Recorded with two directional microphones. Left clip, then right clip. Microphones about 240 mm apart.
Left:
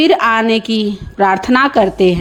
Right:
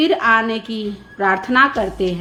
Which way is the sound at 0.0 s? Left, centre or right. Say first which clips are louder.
Left 4 dB; left.